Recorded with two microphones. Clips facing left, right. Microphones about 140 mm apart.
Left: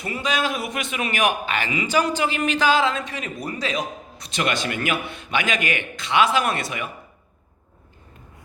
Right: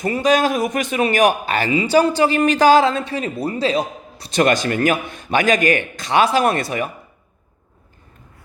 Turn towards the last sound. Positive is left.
turn(degrees=-40)  # may be behind; listen again after turning